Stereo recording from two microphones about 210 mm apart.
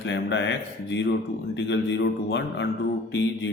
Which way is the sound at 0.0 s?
60° left (ahead or behind).